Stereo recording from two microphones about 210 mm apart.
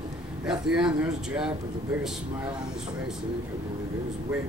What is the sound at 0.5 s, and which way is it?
Speech, 5° right (ahead or behind).